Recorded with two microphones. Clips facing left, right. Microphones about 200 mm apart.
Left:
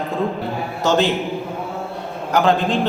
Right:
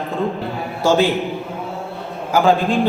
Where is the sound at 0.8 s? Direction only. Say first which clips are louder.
Right 2 dB; 10° right (ahead or behind).